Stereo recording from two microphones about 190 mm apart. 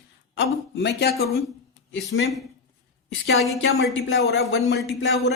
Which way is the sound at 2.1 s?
90° left.